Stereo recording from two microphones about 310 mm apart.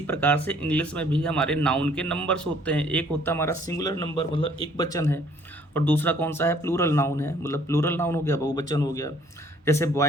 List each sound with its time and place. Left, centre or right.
0.1 s speech: centre